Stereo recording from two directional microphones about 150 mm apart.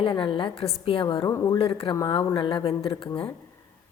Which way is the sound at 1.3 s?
20° left (ahead or behind).